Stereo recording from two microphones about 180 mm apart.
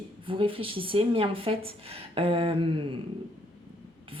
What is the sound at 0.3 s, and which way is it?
Speech, 30° right (ahead or behind).